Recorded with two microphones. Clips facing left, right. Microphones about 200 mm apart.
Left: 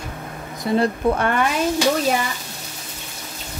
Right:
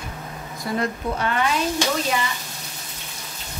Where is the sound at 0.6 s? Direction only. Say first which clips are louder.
Left 6 dB; 30° left (ahead or behind).